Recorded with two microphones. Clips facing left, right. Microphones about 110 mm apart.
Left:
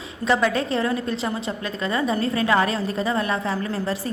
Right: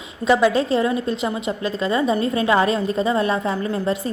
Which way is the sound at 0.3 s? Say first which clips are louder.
Right 4 dB; 20° right (ahead or behind).